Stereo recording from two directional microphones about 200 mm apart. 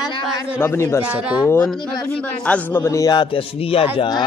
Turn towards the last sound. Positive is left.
turn(degrees=20)  # may be behind; listen again after turning